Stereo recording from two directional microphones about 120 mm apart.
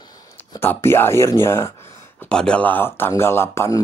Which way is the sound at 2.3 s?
10° left (ahead or behind).